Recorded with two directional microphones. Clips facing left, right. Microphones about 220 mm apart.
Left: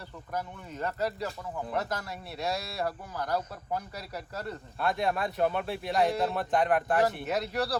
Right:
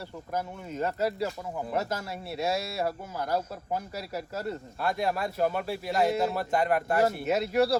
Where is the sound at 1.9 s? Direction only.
25° right (ahead or behind).